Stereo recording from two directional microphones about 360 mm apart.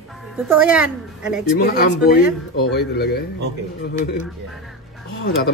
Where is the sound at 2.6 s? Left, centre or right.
Left.